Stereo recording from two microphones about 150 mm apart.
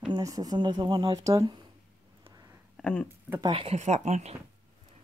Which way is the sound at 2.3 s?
20° right (ahead or behind).